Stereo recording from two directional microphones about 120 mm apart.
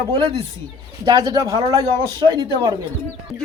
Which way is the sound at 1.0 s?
30° right (ahead or behind).